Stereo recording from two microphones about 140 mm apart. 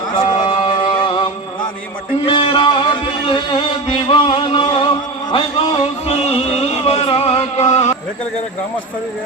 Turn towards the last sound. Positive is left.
turn(degrees=55)  # may be behind; listen again after turning